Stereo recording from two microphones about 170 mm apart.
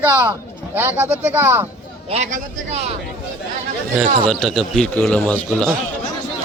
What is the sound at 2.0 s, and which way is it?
Speech, 40° right (ahead or behind).